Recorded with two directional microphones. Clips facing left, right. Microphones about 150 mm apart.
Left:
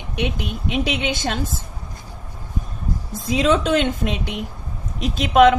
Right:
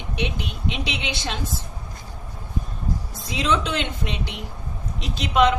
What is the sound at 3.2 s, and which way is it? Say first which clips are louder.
A woman's voice: left 6 dB; 45° left (ahead or behind).